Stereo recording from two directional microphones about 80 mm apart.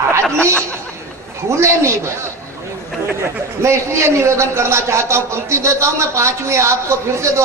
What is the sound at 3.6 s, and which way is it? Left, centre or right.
A man's voice, right.